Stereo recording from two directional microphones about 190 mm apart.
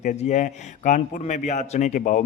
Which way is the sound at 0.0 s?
40° left (ahead or behind).